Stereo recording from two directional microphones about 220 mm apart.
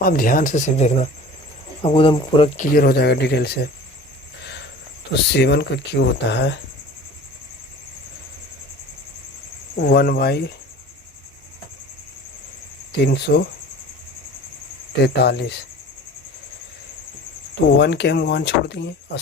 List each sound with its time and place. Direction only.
0.0 s speech: 40° left (ahead or behind); by 2.6 s 25° left (ahead or behind)
2.7 s speech: 45° left (ahead or behind)
5.3 s speech: 50° left (ahead or behind)
9.7 s speech: 45° left (ahead or behind)
13.3 s speech: 45° left (ahead or behind)
15.0 s speech: 45° left (ahead or behind)
17.7 s speech: 50° left (ahead or behind)